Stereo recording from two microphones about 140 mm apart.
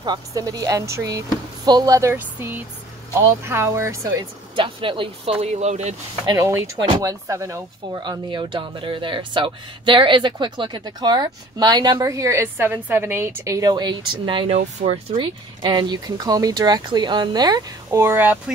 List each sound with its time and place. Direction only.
0.0 s speech: 30° right (ahead or behind)
4.6 s speech: 35° right (ahead or behind); by 5.9 s 55° right (ahead or behind)
6.2 s speech: 20° right (ahead or behind); by 15.2 s 45° right (ahead or behind)
15.6 s speech: 30° right (ahead or behind); by 18.4 s 15° right (ahead or behind)